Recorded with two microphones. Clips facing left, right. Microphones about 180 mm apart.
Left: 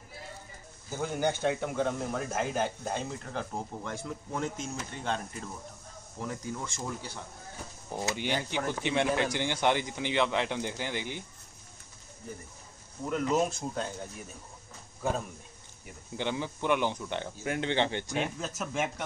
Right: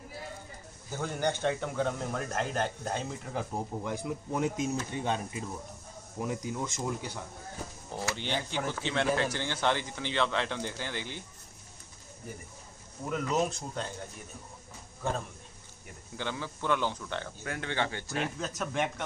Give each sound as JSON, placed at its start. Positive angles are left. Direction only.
{"t": 0.9, "sound": "speech", "side_deg": 10}
{"t": 7.9, "sound": "speech", "side_deg": 20}
{"t": 13.1, "sound": "speech", "side_deg": 0}
{"t": 16.2, "sound": "speech", "side_deg": 20}
{"t": 18.4, "sound": "speech", "side_deg": 5}